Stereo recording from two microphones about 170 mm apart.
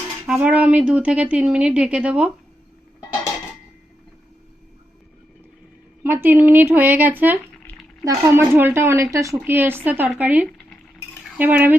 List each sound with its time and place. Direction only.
0.3 s a woman's voice: 10° right (ahead or behind)
6.0 s a woman's voice: 10° right (ahead or behind)